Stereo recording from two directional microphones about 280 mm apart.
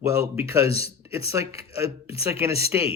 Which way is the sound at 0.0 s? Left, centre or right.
Centre.